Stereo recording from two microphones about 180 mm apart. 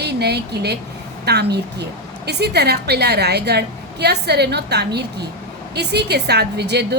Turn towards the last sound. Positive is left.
turn(degrees=-65)  # may be behind; listen again after turning